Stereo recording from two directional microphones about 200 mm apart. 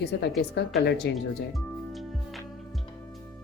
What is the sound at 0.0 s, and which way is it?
Speech, 55° left (ahead or behind).